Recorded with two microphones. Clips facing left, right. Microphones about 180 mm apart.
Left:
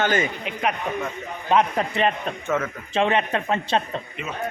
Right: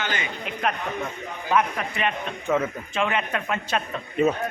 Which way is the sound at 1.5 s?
30° left (ahead or behind).